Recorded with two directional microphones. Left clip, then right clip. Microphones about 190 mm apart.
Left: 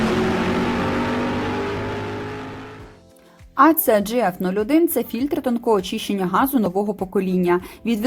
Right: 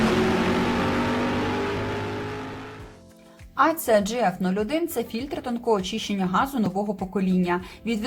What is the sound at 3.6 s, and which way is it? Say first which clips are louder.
A woman's voice: left 5 dB; 50° left (ahead or behind).